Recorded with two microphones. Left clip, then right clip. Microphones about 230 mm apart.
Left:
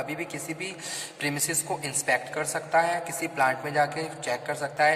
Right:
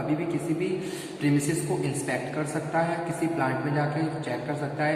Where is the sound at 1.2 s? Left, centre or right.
Left.